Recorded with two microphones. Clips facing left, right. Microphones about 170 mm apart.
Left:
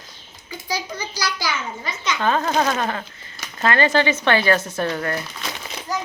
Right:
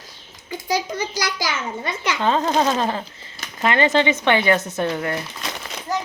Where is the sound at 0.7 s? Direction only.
50° right (ahead or behind).